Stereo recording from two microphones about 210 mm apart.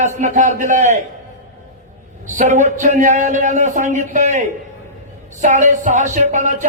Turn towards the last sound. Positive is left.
turn(degrees=-35)  # may be behind; listen again after turning